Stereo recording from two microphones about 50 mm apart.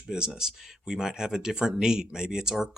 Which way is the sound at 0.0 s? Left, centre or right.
Centre.